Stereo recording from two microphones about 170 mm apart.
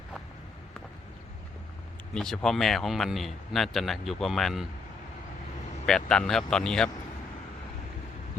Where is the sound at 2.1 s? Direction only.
5° left (ahead or behind).